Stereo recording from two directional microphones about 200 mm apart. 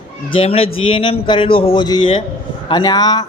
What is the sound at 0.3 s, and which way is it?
A man's voice, 30° left (ahead or behind).